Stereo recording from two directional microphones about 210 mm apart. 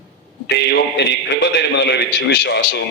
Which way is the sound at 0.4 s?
55° left (ahead or behind).